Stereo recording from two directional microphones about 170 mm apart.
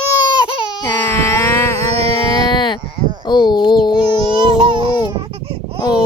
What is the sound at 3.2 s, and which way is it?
Speech, 25° left (ahead or behind).